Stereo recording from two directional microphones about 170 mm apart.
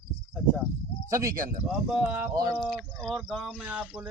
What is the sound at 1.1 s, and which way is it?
Speech, 20° right (ahead or behind).